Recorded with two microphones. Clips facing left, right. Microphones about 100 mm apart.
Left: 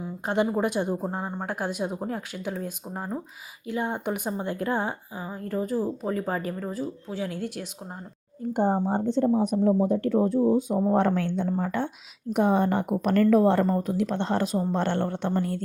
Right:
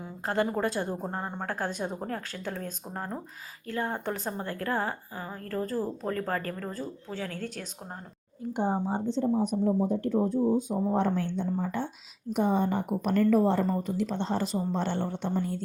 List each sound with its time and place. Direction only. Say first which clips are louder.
0.4 s a woman's voice: left 4 dB; 15° left (ahead or behind)
8.4 s speech: left 5 dB; 50° left (ahead or behind)
9.4 s a woman's voice: left 4 dB; 70° left (ahead or behind)